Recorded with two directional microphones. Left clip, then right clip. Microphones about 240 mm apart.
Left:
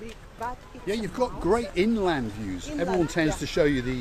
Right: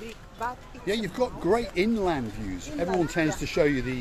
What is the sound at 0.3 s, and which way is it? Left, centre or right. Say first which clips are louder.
Speech: right 1 dB; centre.